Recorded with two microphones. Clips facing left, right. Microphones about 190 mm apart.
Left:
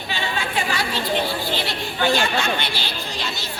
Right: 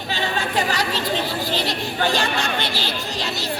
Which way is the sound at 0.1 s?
40° right (ahead or behind).